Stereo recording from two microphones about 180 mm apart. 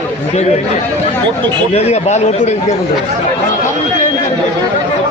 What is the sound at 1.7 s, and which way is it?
Speech, 35° left (ahead or behind).